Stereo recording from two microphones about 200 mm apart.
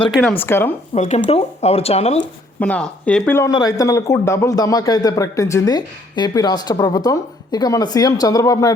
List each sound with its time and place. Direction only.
0.1 s speech: centre (ahead or behind)
0.3 s speech: 10° left (ahead or behind)
0.9 s speech: 35° left (ahead or behind)
2.6 s a man's voice: 5° left (ahead or behind)